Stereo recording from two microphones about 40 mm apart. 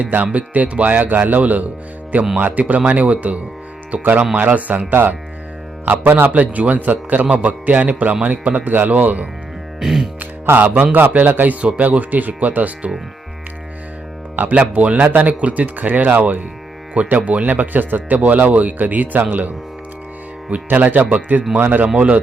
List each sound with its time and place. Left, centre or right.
0.0 s speech: right
3.9 s speech: right
4.9 s speech: right
6.2 s speech: right
9.8 s music: centre
10.4 s a man's voice: right
11.1 s speech: right
14.6 s speech: right
15.0 s speech: right
15.3 s speech: right
15.6 s speech: right
20.7 s speech: right